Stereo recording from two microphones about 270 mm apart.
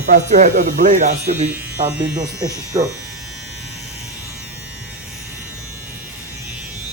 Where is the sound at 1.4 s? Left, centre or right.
Centre.